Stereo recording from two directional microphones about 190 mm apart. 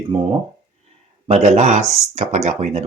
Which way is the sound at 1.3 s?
35° right (ahead or behind).